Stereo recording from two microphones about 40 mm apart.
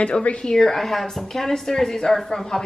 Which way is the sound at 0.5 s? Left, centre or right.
Centre.